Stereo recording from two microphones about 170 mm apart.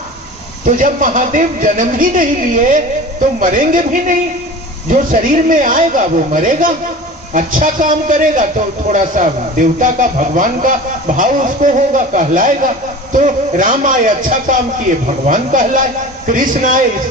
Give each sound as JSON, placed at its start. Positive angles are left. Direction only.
{"t": 0.6, "sound": "a man's voice", "side_deg": -55}